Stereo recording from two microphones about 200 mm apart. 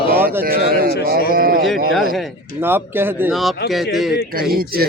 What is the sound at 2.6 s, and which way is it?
Speech, 10° right (ahead or behind).